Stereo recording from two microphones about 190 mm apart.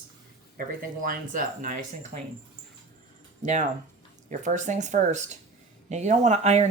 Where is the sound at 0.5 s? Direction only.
45° right (ahead or behind).